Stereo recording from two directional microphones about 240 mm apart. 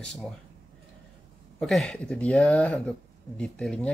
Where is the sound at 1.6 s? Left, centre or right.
Centre.